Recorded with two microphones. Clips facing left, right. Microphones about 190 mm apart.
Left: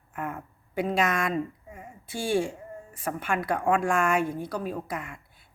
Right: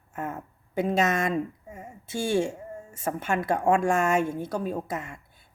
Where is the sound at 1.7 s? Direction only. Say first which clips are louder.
Right 3 dB; 25° right (ahead or behind).